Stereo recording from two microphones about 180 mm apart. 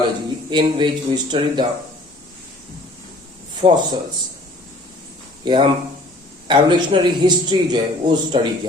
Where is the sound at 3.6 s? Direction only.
20° right (ahead or behind).